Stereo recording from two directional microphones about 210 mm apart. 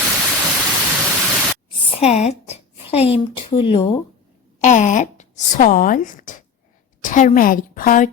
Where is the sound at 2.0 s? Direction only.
30° left (ahead or behind).